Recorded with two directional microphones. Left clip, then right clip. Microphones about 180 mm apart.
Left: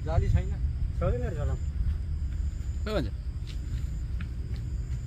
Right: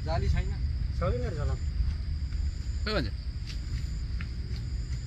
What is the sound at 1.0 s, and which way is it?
Speech, 15° left (ahead or behind).